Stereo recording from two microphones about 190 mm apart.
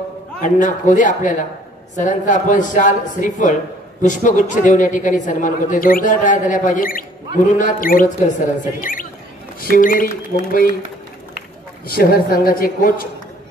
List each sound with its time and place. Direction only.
0.4 s a woman's voice: 40° left (ahead or behind)
9.6 s a woman's voice: 50° left (ahead or behind)
12.0 s a woman's voice: 50° left (ahead or behind)